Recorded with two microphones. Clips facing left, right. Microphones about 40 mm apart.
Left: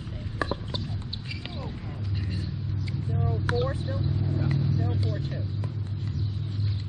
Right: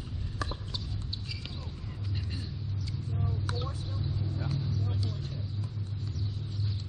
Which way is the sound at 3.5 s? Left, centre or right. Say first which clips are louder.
Left 14 dB; left.